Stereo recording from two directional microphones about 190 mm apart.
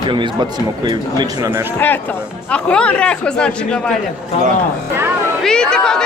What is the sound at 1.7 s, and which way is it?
Speech, 10° left (ahead or behind).